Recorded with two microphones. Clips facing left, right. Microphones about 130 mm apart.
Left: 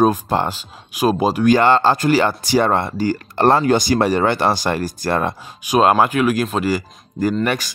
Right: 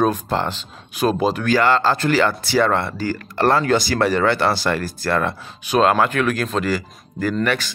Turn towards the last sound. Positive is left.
turn(degrees=15)  # may be behind; listen again after turning